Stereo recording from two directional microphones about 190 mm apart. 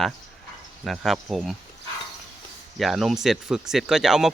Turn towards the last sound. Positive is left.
turn(degrees=0)  # may be behind; listen again after turning